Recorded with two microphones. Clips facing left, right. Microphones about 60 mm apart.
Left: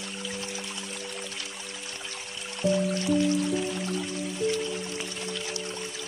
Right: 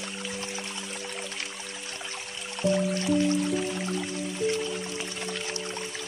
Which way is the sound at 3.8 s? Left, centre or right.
Right.